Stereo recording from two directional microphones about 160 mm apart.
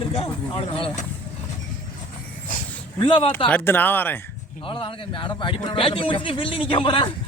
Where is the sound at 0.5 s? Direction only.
35° left (ahead or behind).